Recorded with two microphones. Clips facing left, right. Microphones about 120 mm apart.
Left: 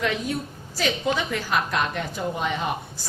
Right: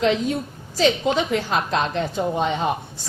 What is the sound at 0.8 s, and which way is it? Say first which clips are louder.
A woman's voice: right 5 dB; 25° right (ahead or behind).